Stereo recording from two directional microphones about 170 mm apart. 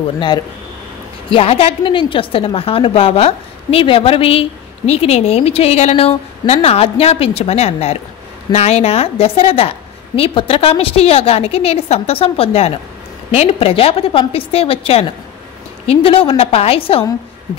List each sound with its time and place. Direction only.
1.3 s a woman's voice: 35° left (ahead or behind)